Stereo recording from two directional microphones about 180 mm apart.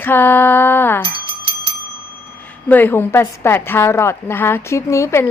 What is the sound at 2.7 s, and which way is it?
A woman's voice, 10° left (ahead or behind).